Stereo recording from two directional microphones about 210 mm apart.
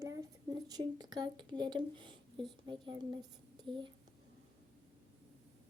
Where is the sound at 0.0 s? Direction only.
15° right (ahead or behind).